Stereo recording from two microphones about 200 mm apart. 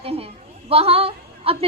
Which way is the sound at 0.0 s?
30° right (ahead or behind).